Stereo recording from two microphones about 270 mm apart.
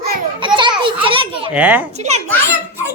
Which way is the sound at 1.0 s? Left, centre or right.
Centre.